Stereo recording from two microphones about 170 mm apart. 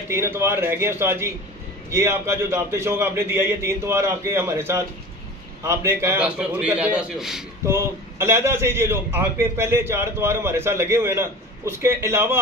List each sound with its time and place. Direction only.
0.1 s a man's voice: 15° right (ahead or behind)
7.6 s a man's voice: 15° right (ahead or behind)